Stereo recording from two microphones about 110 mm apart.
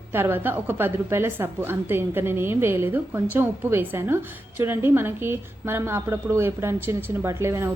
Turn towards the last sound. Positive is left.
turn(degrees=-25)  # may be behind; listen again after turning